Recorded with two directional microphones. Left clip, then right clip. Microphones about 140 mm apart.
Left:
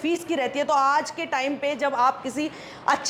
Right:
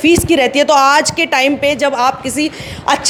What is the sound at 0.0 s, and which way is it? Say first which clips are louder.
A man's voice: right 14 dB; 40° right (ahead or behind).